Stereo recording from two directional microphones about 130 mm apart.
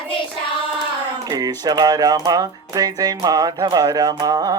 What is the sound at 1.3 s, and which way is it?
Speech, 30° right (ahead or behind).